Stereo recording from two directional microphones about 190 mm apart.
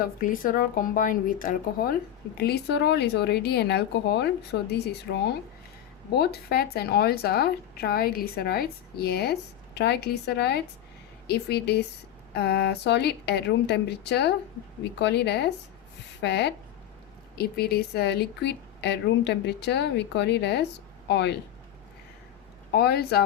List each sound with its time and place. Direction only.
0.0 s speech: 45° left (ahead or behind); by 21.3 s 65° left (ahead or behind)
22.7 s speech: 55° left (ahead or behind)